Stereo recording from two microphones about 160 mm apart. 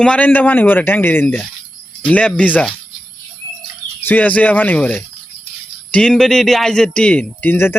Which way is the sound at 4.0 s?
10° left (ahead or behind).